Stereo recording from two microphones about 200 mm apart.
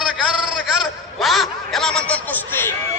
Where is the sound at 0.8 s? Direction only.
Centre (ahead or behind).